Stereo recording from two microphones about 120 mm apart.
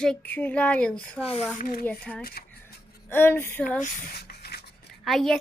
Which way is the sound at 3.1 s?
20° left (ahead or behind).